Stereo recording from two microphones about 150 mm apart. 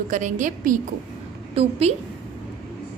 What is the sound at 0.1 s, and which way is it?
Speech, 60° right (ahead or behind).